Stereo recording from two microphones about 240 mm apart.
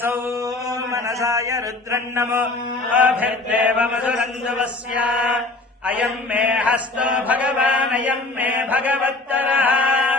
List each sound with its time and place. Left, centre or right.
0.3 s mantra: centre
2.9 s chant: centre
5.8 s mantra: centre